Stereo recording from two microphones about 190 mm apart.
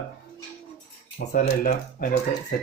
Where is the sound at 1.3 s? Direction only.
45° left (ahead or behind).